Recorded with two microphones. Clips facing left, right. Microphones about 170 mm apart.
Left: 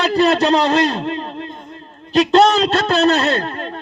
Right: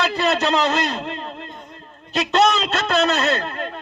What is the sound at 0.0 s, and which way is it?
A man's voice, 35° left (ahead or behind).